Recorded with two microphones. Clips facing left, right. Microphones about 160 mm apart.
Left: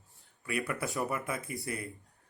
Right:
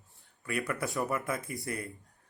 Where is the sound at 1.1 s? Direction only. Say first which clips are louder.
Right 2 dB; 20° left (ahead or behind).